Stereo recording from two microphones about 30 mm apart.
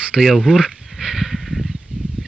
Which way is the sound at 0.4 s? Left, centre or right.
Right.